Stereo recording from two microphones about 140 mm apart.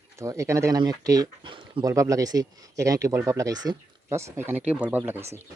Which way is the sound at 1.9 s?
25° right (ahead or behind).